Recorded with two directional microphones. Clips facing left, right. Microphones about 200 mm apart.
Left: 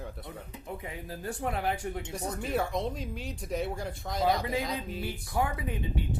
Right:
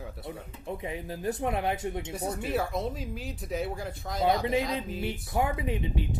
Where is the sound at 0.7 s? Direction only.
20° right (ahead or behind).